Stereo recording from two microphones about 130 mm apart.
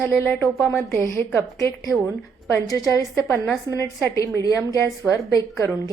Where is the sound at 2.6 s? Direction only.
25° left (ahead or behind).